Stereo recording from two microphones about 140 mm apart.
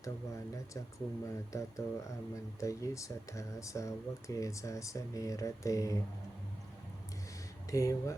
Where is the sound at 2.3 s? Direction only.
25° left (ahead or behind).